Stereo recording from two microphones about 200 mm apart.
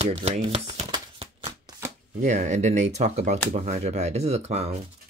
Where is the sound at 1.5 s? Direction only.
15° right (ahead or behind).